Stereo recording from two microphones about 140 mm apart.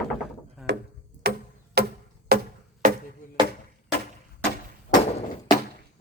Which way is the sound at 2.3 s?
90° right.